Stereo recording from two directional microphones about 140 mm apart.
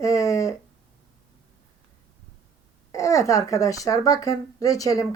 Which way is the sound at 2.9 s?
20° left (ahead or behind).